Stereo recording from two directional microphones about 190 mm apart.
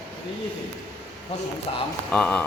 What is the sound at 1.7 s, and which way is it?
Speech, 30° left (ahead or behind).